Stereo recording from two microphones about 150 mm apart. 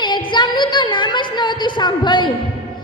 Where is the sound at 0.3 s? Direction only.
30° left (ahead or behind).